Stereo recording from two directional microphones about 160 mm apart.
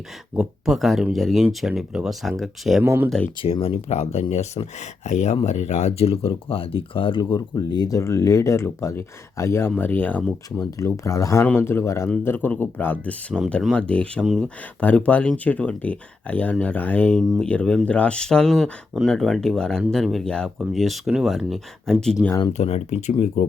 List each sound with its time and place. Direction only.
0.3 s speech: centre (ahead or behind)
2.8 s speech: 15° right (ahead or behind)
3.4 s speech: 35° left (ahead or behind); by 22.3 s 5° left (ahead or behind)
22.5 s speech: 40° left (ahead or behind)